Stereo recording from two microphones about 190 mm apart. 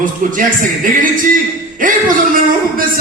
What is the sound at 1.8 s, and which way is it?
Speech, 45° right (ahead or behind).